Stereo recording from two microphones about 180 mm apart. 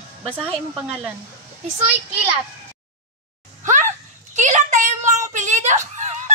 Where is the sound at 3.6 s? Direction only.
45° right (ahead or behind).